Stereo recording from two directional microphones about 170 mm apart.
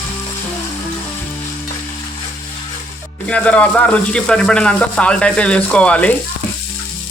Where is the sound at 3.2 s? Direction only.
5° left (ahead or behind).